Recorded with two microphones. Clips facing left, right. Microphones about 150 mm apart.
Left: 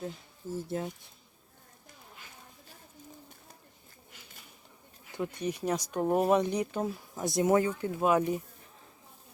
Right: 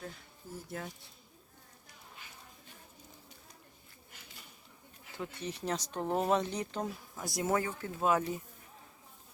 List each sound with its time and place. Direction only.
0.7 s speech: 25° left (ahead or behind)
5.1 s speech: 15° left (ahead or behind)
7.2 s speech: 25° left (ahead or behind)